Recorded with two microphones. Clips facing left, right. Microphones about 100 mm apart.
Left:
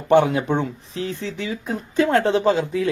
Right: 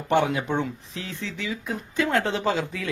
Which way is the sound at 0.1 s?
40° left (ahead or behind).